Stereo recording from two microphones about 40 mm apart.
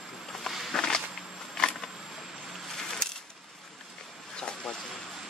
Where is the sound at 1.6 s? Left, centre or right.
Left.